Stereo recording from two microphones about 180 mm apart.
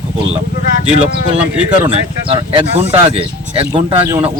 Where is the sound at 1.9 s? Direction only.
30° right (ahead or behind).